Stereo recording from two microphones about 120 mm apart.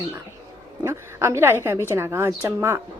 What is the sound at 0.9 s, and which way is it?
Speech, 20° right (ahead or behind).